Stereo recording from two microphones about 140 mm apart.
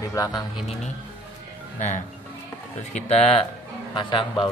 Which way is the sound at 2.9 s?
45° left (ahead or behind).